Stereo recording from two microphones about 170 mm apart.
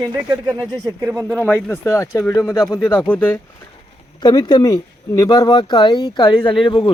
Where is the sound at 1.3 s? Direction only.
10° left (ahead or behind).